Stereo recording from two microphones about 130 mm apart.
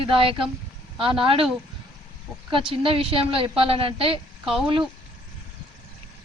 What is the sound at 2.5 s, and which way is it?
A woman's voice, 40° right (ahead or behind).